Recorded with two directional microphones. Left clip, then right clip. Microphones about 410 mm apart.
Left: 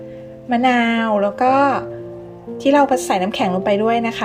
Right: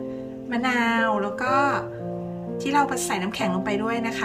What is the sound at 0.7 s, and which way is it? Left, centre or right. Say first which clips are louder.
A woman's voice: left 5 dB; centre.